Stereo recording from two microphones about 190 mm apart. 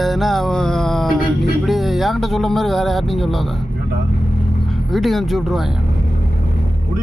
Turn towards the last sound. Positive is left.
turn(degrees=0)  # may be behind; listen again after turning